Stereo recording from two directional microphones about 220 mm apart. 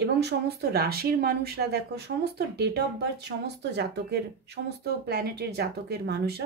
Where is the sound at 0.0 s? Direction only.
50° right (ahead or behind).